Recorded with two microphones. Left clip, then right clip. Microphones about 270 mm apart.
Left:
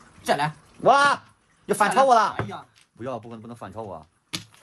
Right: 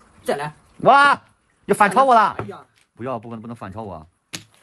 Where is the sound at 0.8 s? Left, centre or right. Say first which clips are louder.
Right 5 dB; centre.